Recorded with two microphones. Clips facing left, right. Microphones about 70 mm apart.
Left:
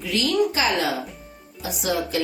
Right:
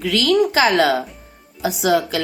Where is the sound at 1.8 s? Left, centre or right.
Right.